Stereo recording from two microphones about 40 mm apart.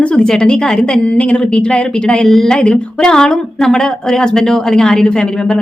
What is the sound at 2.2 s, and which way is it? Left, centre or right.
Speech, centre.